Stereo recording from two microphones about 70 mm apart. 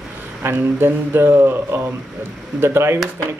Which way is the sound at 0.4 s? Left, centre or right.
Right.